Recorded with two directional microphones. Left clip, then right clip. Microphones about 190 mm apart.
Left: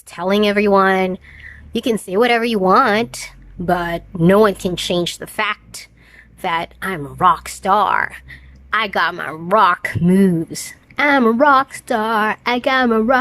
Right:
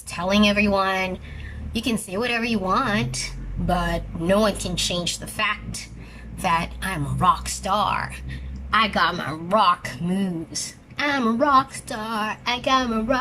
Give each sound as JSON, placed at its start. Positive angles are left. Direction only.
{"t": 0.1, "sound": "speech", "side_deg": 50}